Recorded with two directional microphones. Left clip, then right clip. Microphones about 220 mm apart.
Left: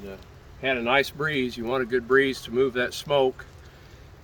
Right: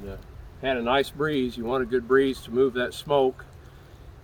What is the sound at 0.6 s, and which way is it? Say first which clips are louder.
Speech: left 1 dB; 15° left (ahead or behind).